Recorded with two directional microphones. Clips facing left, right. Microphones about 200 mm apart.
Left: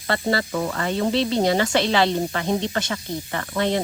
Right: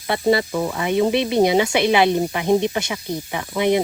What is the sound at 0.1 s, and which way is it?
Speech, 15° right (ahead or behind).